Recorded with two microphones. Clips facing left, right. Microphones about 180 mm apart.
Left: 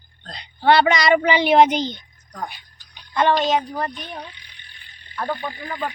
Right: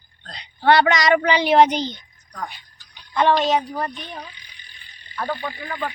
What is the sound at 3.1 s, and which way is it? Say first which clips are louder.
Speech: even; centre (ahead or behind).